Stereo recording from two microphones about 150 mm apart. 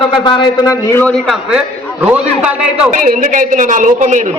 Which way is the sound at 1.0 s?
5° left (ahead or behind).